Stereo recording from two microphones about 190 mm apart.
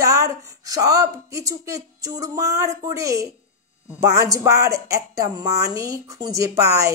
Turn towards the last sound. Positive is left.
turn(degrees=-15)  # may be behind; listen again after turning